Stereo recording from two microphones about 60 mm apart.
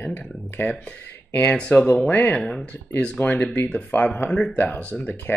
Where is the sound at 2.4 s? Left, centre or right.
Centre.